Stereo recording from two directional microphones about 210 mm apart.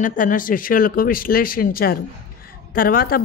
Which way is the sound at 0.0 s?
40° left (ahead or behind).